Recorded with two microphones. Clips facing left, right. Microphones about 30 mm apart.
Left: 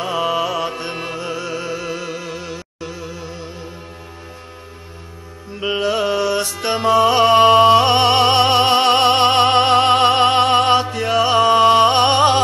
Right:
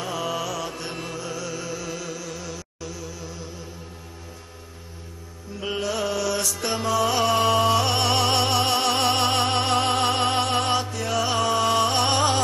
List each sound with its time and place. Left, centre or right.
0.0 s music: left
5.6 s music: left